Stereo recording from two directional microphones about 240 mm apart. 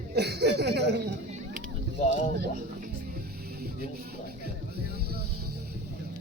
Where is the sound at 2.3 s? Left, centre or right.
Right.